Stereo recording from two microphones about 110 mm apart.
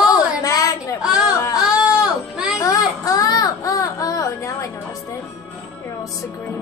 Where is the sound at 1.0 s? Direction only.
5° right (ahead or behind).